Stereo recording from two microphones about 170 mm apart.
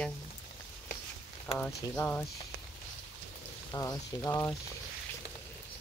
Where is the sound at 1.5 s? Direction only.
35° left (ahead or behind).